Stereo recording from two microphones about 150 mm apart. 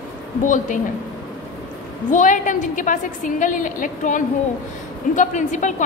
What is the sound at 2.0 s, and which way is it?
A woman's voice, 55° left (ahead or behind).